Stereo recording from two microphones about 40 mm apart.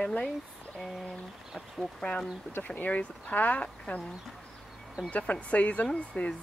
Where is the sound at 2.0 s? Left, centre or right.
Left.